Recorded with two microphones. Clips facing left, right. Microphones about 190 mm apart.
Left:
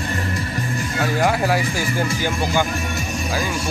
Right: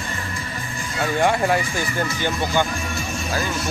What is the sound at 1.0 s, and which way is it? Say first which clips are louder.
Speech: even; 5° left (ahead or behind).